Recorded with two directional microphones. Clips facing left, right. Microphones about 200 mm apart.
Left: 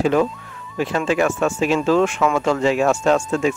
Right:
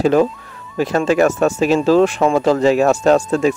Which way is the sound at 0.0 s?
35° right (ahead or behind).